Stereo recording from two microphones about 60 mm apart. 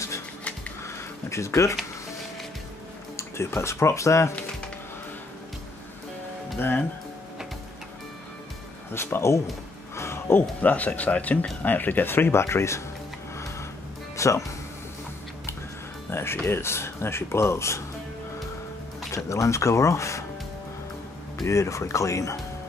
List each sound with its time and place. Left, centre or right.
0.8 s a sound: left
3.2 s speech: left
8.9 s speech: left
9.9 s a sound: left
10.6 s speech: left
14.1 s music: left
16.1 s speech: left
19.1 s speech: left
21.4 s speech: left